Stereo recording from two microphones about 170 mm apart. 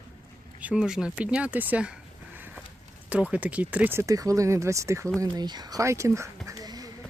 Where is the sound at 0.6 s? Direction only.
5° right (ahead or behind).